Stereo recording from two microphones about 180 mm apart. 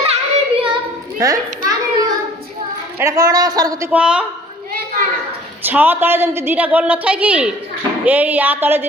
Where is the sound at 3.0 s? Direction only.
20° right (ahead or behind).